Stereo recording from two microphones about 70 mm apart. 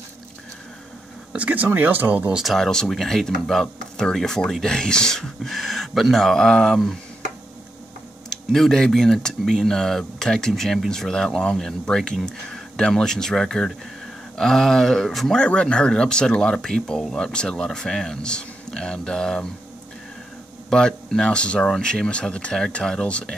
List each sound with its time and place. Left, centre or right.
1.3 s speech: right
2.3 s speech: centre
8.3 s speech: centre
20.7 s speech: centre